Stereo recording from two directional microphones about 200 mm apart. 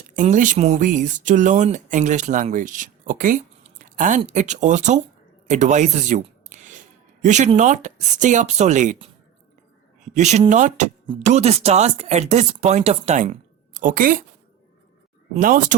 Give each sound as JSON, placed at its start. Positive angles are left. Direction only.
{"t": 0.2, "sound": "speech", "side_deg": -40}
{"t": 10.2, "sound": "speech", "side_deg": -35}
{"t": 15.4, "sound": "speech", "side_deg": -45}